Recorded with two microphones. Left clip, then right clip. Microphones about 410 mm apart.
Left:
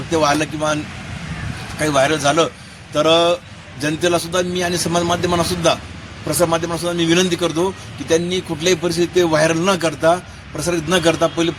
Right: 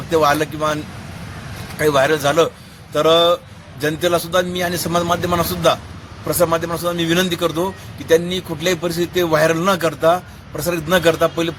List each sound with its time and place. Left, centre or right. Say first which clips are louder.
0.1 s a man's voice: right 1 dB; right
1.8 s a man's voice: right 1 dB; right